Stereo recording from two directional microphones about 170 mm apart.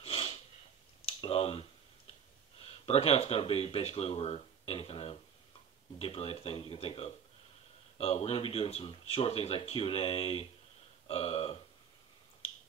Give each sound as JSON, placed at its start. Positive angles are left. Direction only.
{"t": 0.0, "sound": "snort", "side_deg": 35}
{"t": 1.0, "sound": "a sound", "side_deg": 35}
{"t": 2.6, "sound": "speech", "side_deg": 35}